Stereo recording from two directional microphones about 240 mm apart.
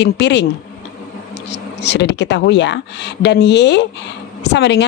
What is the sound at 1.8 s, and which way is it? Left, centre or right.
A woman's voice, left.